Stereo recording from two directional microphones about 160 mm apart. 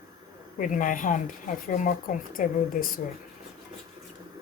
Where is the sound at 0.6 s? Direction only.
55° left (ahead or behind).